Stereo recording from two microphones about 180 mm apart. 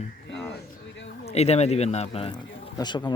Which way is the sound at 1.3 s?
35° left (ahead or behind).